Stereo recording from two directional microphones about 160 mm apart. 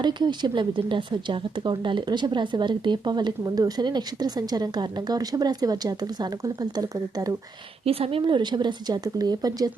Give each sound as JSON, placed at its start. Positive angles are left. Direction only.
{"t": 0.0, "sound": "a woman's voice", "side_deg": -30}
{"t": 7.9, "sound": "a woman's voice", "side_deg": -35}